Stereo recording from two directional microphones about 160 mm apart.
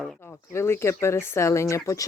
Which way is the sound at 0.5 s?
15° left (ahead or behind).